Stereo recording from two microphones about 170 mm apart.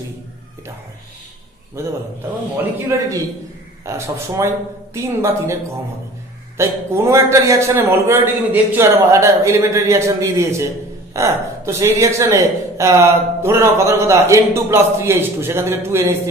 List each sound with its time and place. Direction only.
1.8 s a man's voice: 15° right (ahead or behind)